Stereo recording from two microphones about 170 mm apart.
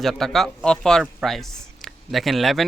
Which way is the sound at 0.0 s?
Centre (ahead or behind).